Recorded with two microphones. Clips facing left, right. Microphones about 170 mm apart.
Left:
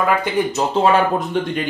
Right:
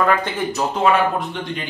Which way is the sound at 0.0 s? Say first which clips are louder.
Even; 10° left (ahead or behind).